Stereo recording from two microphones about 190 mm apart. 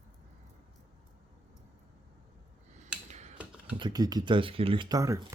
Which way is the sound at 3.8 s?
20° right (ahead or behind).